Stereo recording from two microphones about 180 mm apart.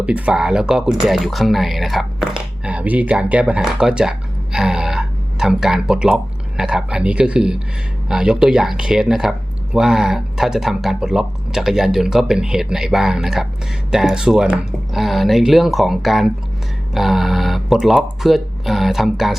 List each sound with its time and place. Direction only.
0.0 s speech: 5° right (ahead or behind)